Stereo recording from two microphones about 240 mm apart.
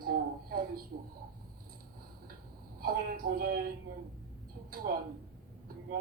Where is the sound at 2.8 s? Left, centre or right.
Right.